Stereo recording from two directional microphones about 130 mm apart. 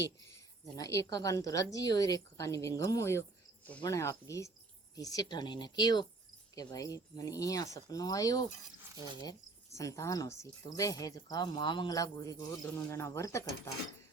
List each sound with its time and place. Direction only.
0.8 s a woman's voice: 25° left (ahead or behind)
9.7 s a woman's voice: 25° left (ahead or behind)